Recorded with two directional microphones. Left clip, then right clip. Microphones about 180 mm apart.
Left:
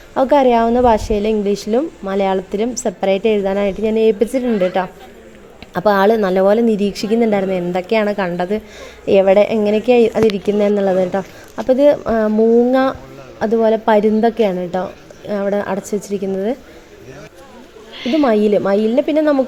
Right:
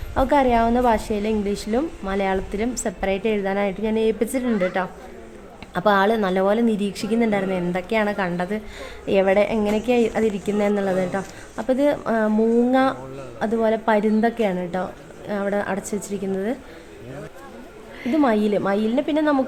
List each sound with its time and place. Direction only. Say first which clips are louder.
0.1 s a woman's voice: left 6 dB; 20° left (ahead or behind)
18.2 s a woman's voice: left 6 dB; 20° left (ahead or behind)